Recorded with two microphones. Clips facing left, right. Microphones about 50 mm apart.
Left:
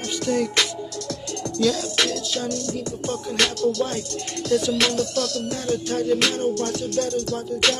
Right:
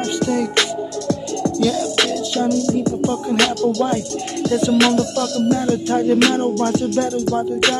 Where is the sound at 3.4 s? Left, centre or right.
Right.